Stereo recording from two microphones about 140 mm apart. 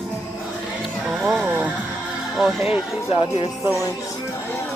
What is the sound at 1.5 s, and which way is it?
Music, 15° right (ahead or behind).